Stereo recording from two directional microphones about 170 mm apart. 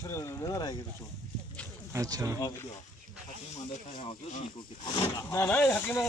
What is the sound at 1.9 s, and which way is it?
Speech, 20° right (ahead or behind).